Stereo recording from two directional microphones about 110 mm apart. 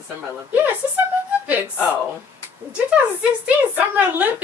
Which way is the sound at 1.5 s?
15° right (ahead or behind).